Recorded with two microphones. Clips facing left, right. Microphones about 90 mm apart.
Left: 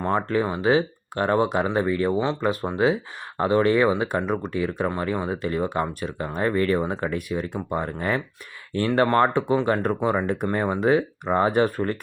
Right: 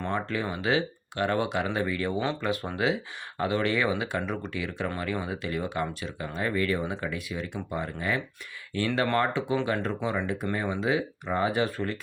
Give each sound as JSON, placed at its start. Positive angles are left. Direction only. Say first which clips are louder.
{"t": 0.0, "sound": "speech", "louder": "left 7 dB", "side_deg": 40}
{"t": 9.2, "sound": "speech", "louder": "left 6 dB", "side_deg": 50}